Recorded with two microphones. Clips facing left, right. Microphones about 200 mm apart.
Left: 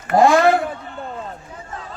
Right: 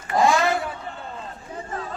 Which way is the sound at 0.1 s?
55° left (ahead or behind).